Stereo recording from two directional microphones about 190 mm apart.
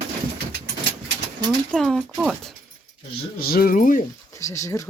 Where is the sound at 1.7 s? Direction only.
Centre (ahead or behind).